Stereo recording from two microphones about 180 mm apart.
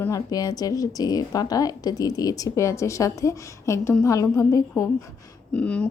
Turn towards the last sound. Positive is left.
turn(degrees=5)  # may be behind; listen again after turning